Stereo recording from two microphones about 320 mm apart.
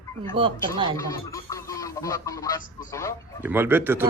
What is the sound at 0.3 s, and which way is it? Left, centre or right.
Speech, centre.